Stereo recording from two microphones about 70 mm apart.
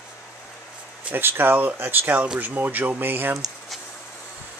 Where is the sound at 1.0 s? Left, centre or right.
Right.